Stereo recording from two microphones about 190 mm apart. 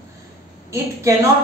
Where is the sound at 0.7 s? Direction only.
15° right (ahead or behind).